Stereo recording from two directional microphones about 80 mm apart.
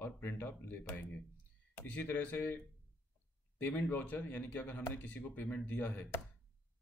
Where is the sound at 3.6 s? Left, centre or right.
Left.